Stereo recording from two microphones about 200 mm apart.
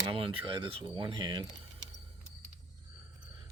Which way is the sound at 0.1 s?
25° right (ahead or behind).